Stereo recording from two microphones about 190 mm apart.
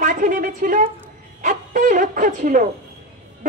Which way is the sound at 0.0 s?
45° right (ahead or behind).